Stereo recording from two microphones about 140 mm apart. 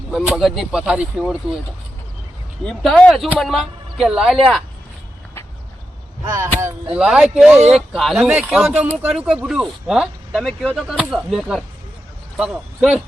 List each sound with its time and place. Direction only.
0.1 s speech: centre (ahead or behind)
3.0 s speech: centre (ahead or behind)
6.3 s chop: 20° right (ahead or behind)
6.9 s a man's voice: 5° right (ahead or behind)